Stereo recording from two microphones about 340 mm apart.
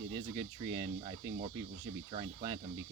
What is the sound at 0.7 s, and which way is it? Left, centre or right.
Speech, centre.